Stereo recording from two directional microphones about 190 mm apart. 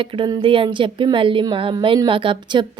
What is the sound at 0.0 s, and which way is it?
Speech, 25° right (ahead or behind).